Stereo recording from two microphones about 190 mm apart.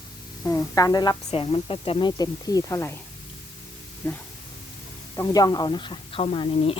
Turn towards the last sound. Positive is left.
turn(degrees=30)  # may be behind; listen again after turning